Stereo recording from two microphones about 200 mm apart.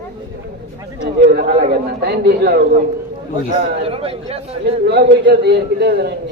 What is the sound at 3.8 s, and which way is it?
Speech, 30° right (ahead or behind).